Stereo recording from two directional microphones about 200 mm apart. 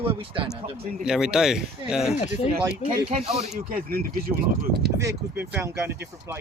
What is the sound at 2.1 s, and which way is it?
Speech, 35° left (ahead or behind).